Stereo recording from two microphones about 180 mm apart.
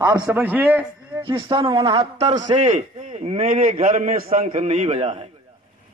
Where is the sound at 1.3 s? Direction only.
25° right (ahead or behind).